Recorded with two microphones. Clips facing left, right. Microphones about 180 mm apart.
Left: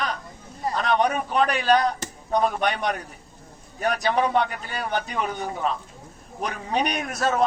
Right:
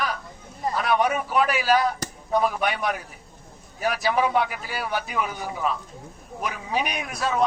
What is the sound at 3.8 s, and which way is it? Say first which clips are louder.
A man's voice: even; 5° right (ahead or behind).